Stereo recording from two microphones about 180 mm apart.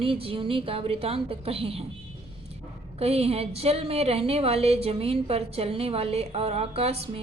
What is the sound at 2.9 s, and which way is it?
A woman's voice, 35° right (ahead or behind).